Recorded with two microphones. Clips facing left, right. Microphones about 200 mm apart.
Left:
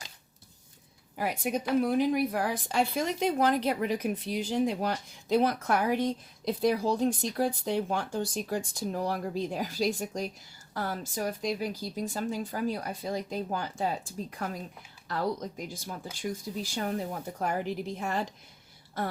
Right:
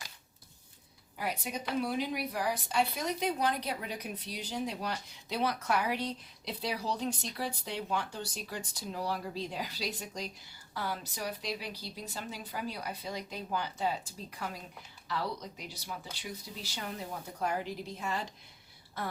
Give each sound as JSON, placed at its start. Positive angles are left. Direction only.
{"t": 1.2, "sound": "speech", "side_deg": 50}